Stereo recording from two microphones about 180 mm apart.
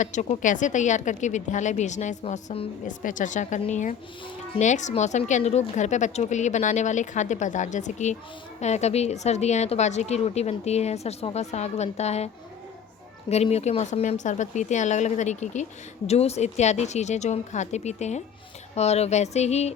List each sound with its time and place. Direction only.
0.0 s a woman's voice: 40° left (ahead or behind)
13.3 s a woman's voice: 35° left (ahead or behind)